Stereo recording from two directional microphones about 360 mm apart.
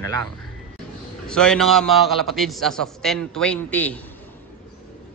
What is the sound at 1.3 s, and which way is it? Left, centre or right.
A man's voice, centre.